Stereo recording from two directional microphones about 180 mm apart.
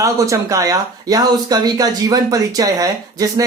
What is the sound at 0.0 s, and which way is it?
Speech, 15° right (ahead or behind).